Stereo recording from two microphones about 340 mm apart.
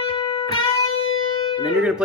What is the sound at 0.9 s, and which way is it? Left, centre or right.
Music, left.